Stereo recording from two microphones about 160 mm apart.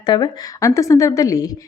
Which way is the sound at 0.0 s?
25° left (ahead or behind).